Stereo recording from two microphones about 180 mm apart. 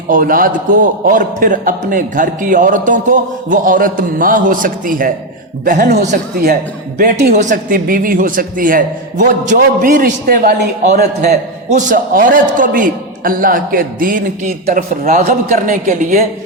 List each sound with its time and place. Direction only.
0.1 s a man's voice: 50° right (ahead or behind)
7.0 s a man's voice: 60° right (ahead or behind)
7.3 s a man's voice: 45° right (ahead or behind)
11.7 s a man's voice: 45° right (ahead or behind)